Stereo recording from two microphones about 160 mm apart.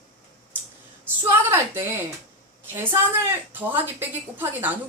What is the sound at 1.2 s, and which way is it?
Speech, 15° right (ahead or behind).